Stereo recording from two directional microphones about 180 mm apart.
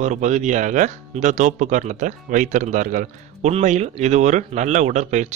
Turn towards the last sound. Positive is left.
turn(degrees=-40)  # may be behind; listen again after turning